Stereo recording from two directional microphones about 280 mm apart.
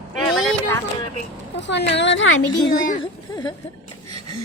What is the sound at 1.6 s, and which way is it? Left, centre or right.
Speech, left.